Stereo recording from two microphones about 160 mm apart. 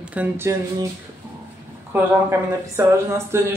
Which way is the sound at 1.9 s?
15° right (ahead or behind).